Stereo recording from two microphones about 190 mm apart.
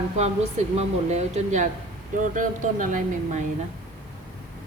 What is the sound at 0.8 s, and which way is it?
A woman's voice, 40° right (ahead or behind).